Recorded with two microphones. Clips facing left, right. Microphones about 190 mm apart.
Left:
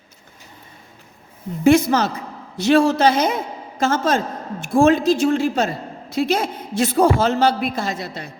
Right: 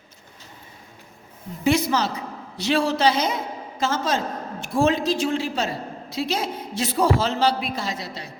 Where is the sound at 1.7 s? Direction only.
50° left (ahead or behind).